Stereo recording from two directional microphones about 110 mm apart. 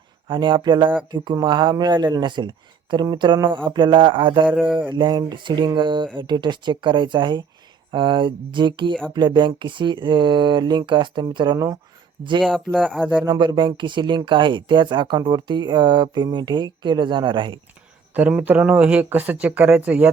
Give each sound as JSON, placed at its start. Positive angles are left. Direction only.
{"t": 0.3, "sound": "speech", "side_deg": -45}
{"t": 4.4, "sound": "speech", "side_deg": 0}
{"t": 4.9, "sound": "speech", "side_deg": -45}
{"t": 11.5, "sound": "speech", "side_deg": -30}
{"t": 12.4, "sound": "speech", "side_deg": 5}
{"t": 13.2, "sound": "speech", "side_deg": -40}
{"t": 18.1, "sound": "speech", "side_deg": -15}